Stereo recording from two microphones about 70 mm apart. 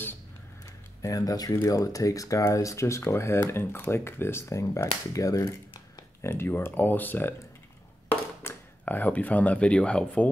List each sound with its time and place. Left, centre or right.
1.0 s speech: left
1.5 s speech: left
6.2 s speech: left; by 10.3 s centre